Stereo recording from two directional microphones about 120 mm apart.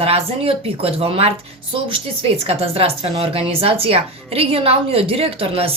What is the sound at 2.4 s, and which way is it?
Speech, 55° right (ahead or behind).